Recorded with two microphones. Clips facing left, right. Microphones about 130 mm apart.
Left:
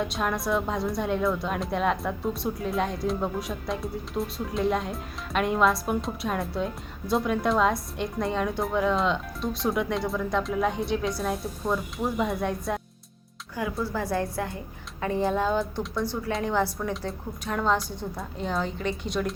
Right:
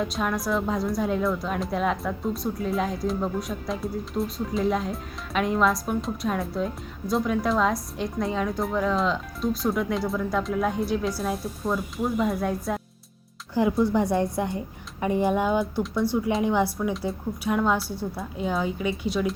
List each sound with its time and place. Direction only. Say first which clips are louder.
0.0 s a woman's voice: right 1 dB; centre (ahead or behind)
13.5 s a woman's voice: right 8 dB; 25° right (ahead or behind); by 19.3 s 5° right (ahead or behind)